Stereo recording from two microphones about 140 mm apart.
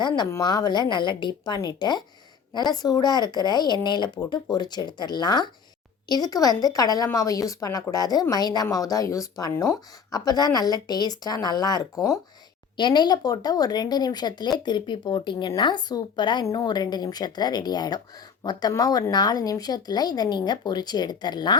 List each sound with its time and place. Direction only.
0.3 s speech: 25° left (ahead or behind)